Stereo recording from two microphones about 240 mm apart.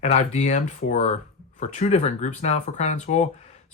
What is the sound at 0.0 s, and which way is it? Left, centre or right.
Speech, left.